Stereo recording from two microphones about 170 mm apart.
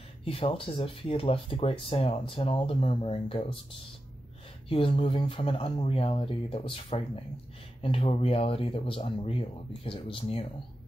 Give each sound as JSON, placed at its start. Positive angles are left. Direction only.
{"t": 0.2, "sound": "speech", "side_deg": 35}
{"t": 4.6, "sound": "speech", "side_deg": 35}